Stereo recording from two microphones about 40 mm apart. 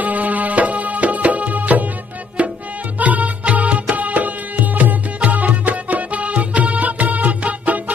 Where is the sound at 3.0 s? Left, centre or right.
Right.